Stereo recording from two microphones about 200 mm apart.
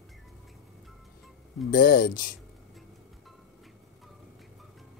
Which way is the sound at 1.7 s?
45° left (ahead or behind).